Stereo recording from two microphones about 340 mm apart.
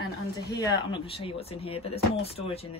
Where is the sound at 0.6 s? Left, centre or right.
Centre.